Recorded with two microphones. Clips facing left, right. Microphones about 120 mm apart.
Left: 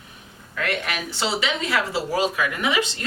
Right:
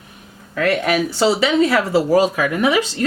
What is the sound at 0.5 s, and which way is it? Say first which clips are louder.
Speech: right 10 dB; 40° right (ahead or behind).